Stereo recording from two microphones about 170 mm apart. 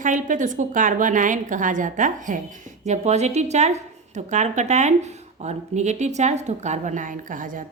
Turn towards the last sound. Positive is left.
turn(degrees=-50)  # may be behind; listen again after turning